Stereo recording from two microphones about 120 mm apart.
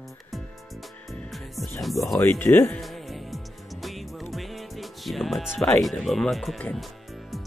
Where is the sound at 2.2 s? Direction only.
15° left (ahead or behind).